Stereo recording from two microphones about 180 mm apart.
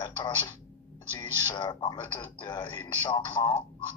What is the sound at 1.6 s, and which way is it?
Speech, 25° left (ahead or behind).